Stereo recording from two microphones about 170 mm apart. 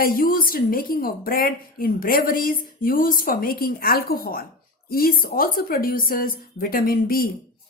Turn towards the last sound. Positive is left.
turn(degrees=60)  # may be behind; listen again after turning